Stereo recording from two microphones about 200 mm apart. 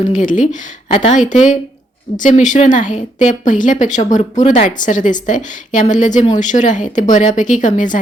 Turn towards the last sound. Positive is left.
turn(degrees=40)  # may be behind; listen again after turning